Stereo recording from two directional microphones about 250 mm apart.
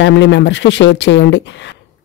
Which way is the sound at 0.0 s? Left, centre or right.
Left.